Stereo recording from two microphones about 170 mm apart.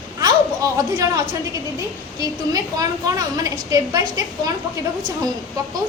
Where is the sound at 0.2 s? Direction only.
20° right (ahead or behind).